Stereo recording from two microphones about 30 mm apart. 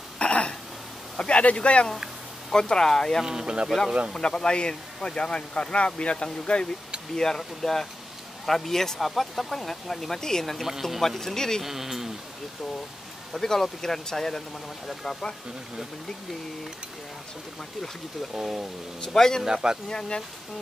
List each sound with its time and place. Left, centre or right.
0.2 s throat clearing: left
1.1 s speech: left
1.4 s speech: left
2.5 s speech: left
3.3 s a man's voice: right
4.2 s speech: left
7.2 s speech: centre
10.6 s speech: centre
11.0 s speech: centre
11.6 s speech: centre
13.3 s speech: centre
18.9 s speech: centre
19.4 s a man's voice: centre
19.9 s speech: left